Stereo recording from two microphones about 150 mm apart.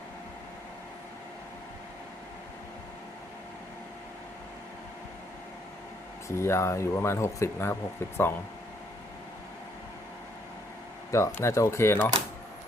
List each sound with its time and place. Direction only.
6.2 s speech: 15° left (ahead or behind)
11.1 s speech: 20° left (ahead or behind)